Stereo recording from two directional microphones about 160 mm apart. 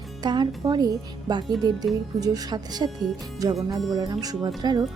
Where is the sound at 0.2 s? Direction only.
25° right (ahead or behind).